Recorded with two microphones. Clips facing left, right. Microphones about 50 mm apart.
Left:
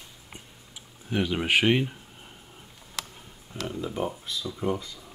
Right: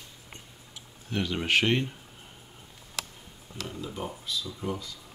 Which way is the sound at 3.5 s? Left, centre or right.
Left.